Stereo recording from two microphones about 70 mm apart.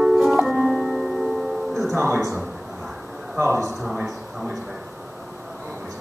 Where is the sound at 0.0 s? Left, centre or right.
Centre.